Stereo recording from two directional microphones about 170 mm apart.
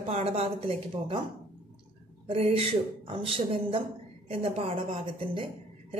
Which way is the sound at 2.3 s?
35° right (ahead or behind).